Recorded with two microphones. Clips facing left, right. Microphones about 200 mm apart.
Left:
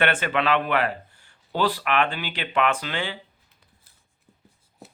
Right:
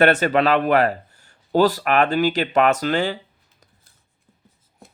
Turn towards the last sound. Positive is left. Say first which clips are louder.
# right 7 dB
turn(degrees=-40)  # may be behind; listen again after turning